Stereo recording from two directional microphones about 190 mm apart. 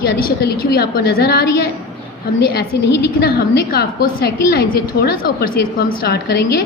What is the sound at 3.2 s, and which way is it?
A woman's voice, 55° left (ahead or behind).